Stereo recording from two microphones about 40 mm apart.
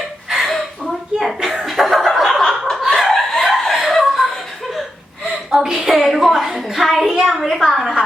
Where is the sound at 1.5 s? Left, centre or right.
Centre.